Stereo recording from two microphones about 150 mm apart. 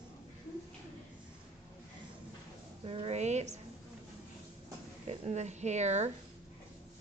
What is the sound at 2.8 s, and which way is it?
Speech, 40° right (ahead or behind).